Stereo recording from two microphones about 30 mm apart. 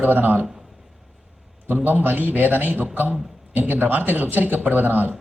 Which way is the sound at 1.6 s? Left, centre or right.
Right.